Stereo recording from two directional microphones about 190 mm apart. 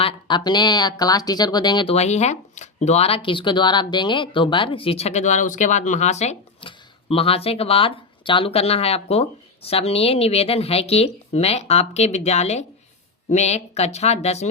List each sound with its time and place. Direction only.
0.0 s speech: 25° left (ahead or behind)